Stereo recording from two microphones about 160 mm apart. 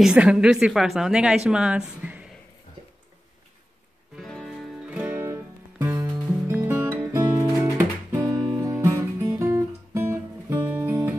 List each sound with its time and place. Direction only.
0.0 s a woman's voice: 5° right (ahead or behind)
4.2 s music: centre (ahead or behind)